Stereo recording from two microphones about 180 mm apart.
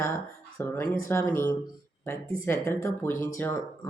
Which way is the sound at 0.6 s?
10° left (ahead or behind).